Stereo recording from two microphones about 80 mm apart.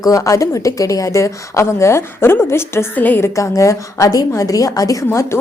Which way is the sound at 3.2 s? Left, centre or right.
Left.